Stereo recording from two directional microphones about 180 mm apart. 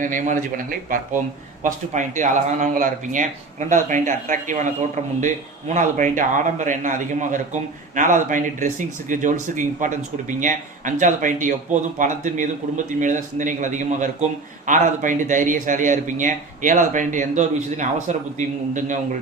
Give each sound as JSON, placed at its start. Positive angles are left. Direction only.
{"t": 0.0, "sound": "speech", "side_deg": -45}